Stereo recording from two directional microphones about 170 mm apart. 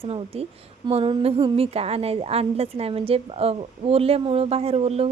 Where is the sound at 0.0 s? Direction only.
35° right (ahead or behind).